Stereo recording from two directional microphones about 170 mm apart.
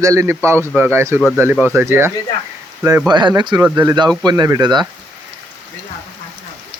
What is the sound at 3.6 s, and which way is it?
A man's voice, 15° right (ahead or behind).